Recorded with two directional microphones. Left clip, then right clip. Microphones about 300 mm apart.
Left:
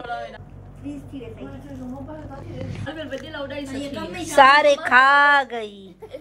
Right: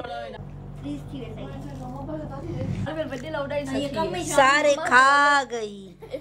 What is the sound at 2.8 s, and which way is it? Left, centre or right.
Speech, right.